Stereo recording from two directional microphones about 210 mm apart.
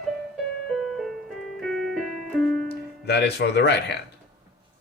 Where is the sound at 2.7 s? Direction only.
50° left (ahead or behind).